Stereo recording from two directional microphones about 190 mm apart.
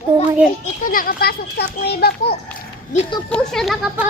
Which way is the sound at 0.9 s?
50° left (ahead or behind).